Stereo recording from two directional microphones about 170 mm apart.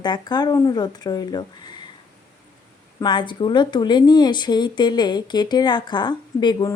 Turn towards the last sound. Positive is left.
turn(degrees=25)  # may be behind; listen again after turning